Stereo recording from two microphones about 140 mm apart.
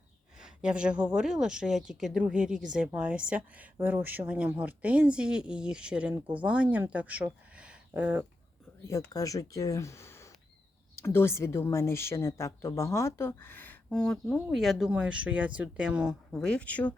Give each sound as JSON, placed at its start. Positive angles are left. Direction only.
{"t": 0.3, "sound": "a woman's voice", "side_deg": -5}
{"t": 7.5, "sound": "a sound", "side_deg": -10}
{"t": 8.9, "sound": "speech", "side_deg": 25}